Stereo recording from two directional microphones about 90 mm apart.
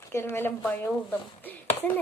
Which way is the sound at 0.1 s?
30° left (ahead or behind).